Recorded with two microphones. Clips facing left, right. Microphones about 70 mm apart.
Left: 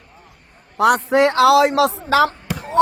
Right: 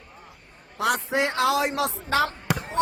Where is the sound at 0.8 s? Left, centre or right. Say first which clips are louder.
Left 10 dB; left.